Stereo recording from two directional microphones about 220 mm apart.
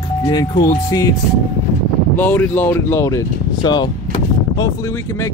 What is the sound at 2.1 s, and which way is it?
Speech, 10° left (ahead or behind).